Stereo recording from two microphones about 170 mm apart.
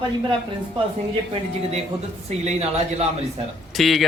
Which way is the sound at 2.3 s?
40° right (ahead or behind).